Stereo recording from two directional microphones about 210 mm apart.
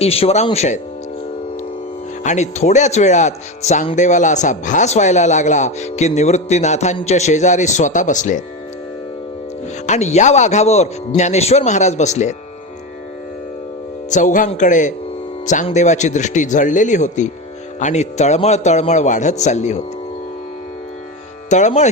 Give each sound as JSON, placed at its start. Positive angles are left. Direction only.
{"t": 0.0, "sound": "speech", "side_deg": 30}
{"t": 2.2, "sound": "speech", "side_deg": 35}
{"t": 9.8, "sound": "speech", "side_deg": 30}
{"t": 14.1, "sound": "speech", "side_deg": 35}
{"t": 21.5, "sound": "speech", "side_deg": 35}